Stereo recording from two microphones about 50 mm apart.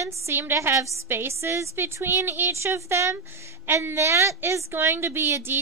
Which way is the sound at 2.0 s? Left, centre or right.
Right.